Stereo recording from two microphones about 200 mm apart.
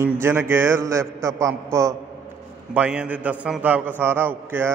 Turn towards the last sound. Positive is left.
turn(degrees=-10)  # may be behind; listen again after turning